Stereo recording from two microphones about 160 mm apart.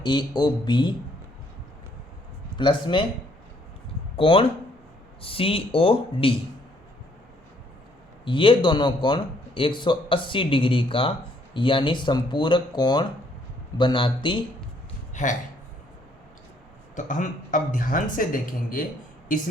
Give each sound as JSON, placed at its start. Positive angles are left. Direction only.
{"t": 0.0, "sound": "speech", "side_deg": 30}
{"t": 2.6, "sound": "a man's voice", "side_deg": 30}
{"t": 4.2, "sound": "a man's voice", "side_deg": 35}
{"t": 8.2, "sound": "a man's voice", "side_deg": 30}
{"t": 15.1, "sound": "a sound", "side_deg": 50}
{"t": 16.9, "sound": "speech", "side_deg": 50}